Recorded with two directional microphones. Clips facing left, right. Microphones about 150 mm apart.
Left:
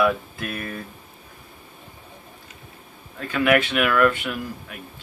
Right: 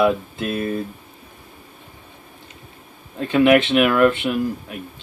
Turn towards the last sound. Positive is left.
turn(degrees=-25)  # may be behind; listen again after turning